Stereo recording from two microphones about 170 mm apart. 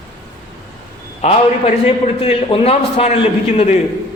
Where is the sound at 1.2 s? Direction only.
40° left (ahead or behind).